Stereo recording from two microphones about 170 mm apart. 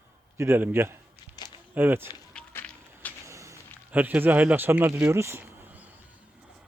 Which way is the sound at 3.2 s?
15° right (ahead or behind).